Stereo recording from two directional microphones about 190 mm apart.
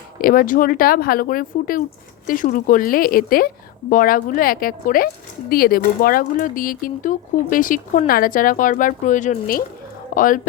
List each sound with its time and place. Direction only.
0.2 s a woman's voice: 50° left (ahead or behind)